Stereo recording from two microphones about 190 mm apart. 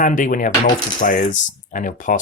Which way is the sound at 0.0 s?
45° left (ahead or behind).